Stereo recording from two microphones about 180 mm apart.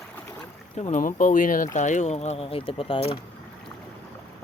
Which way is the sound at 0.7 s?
40° left (ahead or behind).